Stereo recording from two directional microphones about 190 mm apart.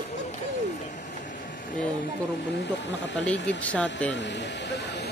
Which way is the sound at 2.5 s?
65° left (ahead or behind).